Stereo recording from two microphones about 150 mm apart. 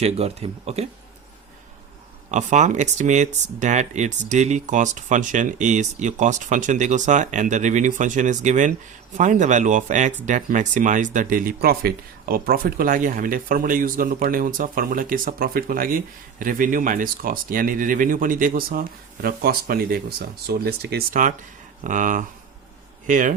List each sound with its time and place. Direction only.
0.0 s speech: 45° right (ahead or behind)
2.3 s speech: 50° right (ahead or behind)